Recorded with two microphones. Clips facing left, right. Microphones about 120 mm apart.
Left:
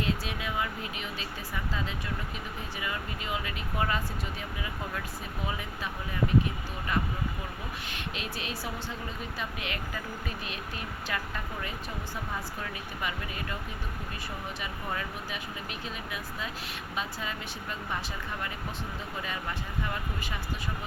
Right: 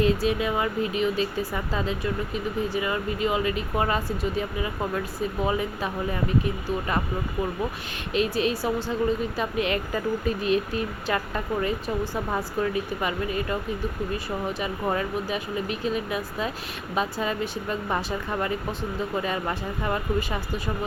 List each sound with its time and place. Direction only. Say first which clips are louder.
0.0 s speech: right 10 dB; 40° right (ahead or behind)
8.1 s speech: right 17 dB; 35° right (ahead or behind)
14.8 s speech: right 10 dB; 35° right (ahead or behind)